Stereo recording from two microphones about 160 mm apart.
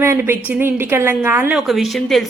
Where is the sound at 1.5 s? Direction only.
Centre (ahead or behind).